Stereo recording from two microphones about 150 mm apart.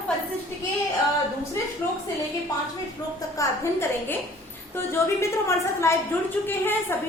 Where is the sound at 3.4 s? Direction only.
20° left (ahead or behind).